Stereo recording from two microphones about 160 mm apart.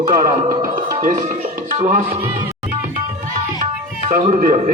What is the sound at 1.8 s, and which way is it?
Speech, 50° right (ahead or behind).